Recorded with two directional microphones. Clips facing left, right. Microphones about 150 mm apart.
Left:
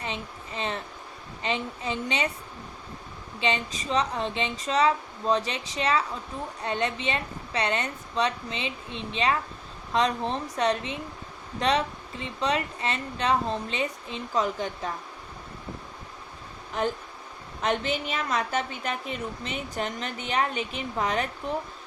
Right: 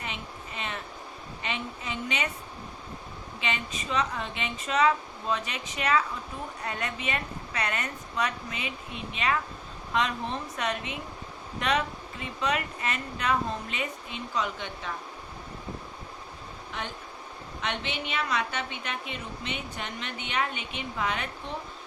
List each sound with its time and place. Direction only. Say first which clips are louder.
0.0 s a sound: left 3 dB; 30° left (ahead or behind)
1.4 s a woman's voice: left 5 dB; 30° left (ahead or behind)
3.4 s a woman's voice: left 5 dB; 30° left (ahead or behind)
17.6 s a woman's voice: left 6 dB; 40° left (ahead or behind)